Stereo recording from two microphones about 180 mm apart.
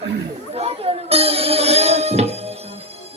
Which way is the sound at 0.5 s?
35° right (ahead or behind).